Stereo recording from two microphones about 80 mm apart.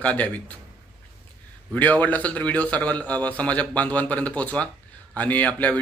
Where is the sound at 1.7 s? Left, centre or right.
Left.